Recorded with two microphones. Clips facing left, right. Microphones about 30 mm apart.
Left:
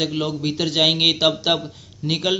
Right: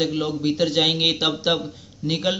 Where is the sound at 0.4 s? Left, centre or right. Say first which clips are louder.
Even; left.